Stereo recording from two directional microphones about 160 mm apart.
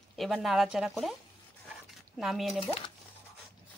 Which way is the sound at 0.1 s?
Centre (ahead or behind).